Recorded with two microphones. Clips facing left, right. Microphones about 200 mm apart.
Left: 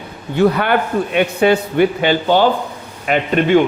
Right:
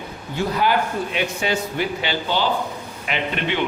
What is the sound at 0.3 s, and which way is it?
A man's voice, 65° left (ahead or behind).